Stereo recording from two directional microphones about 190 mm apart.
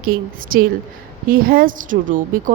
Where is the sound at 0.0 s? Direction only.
50° right (ahead or behind).